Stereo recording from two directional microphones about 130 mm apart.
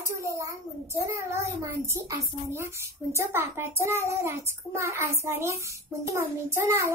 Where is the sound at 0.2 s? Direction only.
25° right (ahead or behind).